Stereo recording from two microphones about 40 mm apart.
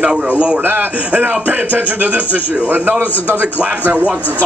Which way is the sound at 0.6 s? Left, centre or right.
Right.